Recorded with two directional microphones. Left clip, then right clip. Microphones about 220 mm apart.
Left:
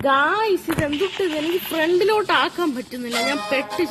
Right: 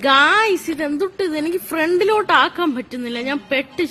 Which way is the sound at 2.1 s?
Centre (ahead or behind).